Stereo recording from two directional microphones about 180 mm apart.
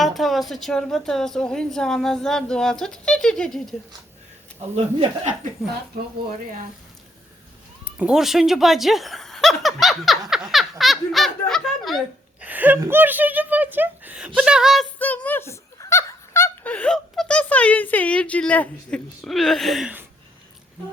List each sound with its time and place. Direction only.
0.0 s speech: centre (ahead or behind)
4.7 s speech: 40° right (ahead or behind)
7.9 s speech: 5° right (ahead or behind)
14.9 s speech: 10° left (ahead or behind); by 20.1 s 5° right (ahead or behind)